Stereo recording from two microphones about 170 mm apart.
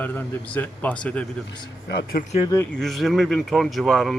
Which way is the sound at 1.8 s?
65° left (ahead or behind).